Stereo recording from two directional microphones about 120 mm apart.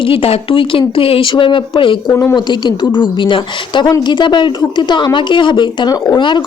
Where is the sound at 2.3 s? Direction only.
40° left (ahead or behind).